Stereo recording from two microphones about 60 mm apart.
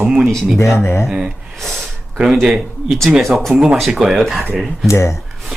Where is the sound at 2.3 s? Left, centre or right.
Centre.